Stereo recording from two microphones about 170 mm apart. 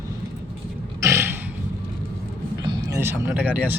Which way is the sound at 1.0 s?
15° right (ahead or behind).